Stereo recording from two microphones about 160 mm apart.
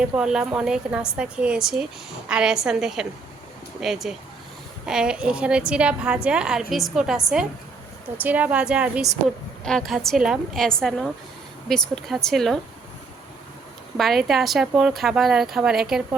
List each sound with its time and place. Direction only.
0.0 s a woman's voice: 5° right (ahead or behind)
13.9 s a woman's voice: centre (ahead or behind)